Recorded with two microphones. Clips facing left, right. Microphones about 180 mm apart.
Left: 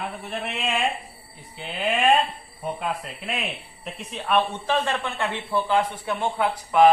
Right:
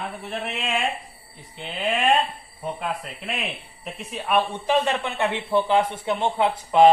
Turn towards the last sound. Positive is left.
turn(degrees=-25)  # may be behind; listen again after turning